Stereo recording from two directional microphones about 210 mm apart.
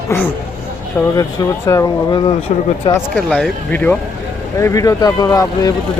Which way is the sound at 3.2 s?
5° left (ahead or behind).